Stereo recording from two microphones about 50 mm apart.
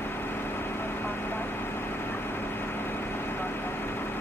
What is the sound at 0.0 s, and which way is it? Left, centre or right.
Vehicle, left.